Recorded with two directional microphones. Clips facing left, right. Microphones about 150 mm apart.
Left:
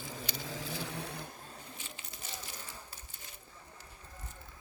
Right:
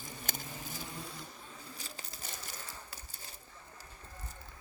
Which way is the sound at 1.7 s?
35° right (ahead or behind).